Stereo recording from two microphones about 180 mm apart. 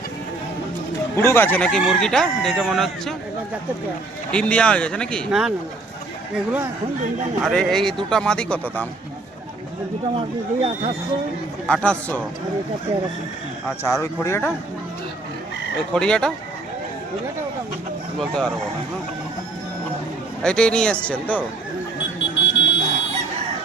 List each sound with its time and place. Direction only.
1.1 s speech: 15° left (ahead or behind)
4.3 s speech: 5° left (ahead or behind)
7.4 s speech: 5° left (ahead or behind)
10.2 s speech: 35° right (ahead or behind)
11.7 s speech: 5° left (ahead or behind)
13.8 s speech: 15° left (ahead or behind)
15.9 s speech: 5° left (ahead or behind)
18.2 s speech: 5° left (ahead or behind)
20.4 s speech: 5° left (ahead or behind)
22.4 s a sound: 80° left